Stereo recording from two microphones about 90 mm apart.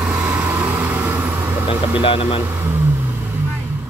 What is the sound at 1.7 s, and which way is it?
Speech, 85° left.